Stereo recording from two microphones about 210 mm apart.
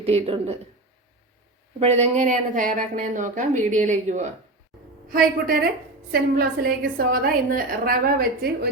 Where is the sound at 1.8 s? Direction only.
30° right (ahead or behind).